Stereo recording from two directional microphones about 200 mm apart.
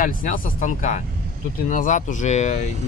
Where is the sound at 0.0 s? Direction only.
45° left (ahead or behind).